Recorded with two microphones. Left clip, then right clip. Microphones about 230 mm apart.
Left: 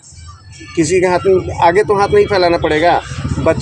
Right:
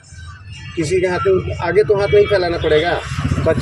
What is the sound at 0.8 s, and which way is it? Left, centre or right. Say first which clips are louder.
Speech: left 5 dB; left.